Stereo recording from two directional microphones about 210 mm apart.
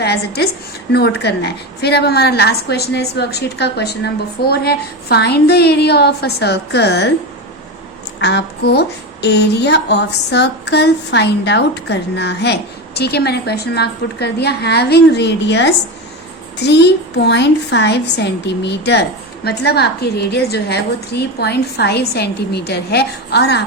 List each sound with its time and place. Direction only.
0.0 s a woman's voice: 50° left (ahead or behind)
8.2 s a woman's voice: 55° left (ahead or behind)